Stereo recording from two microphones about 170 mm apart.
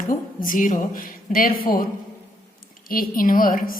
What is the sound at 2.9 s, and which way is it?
Speech, 55° left (ahead or behind).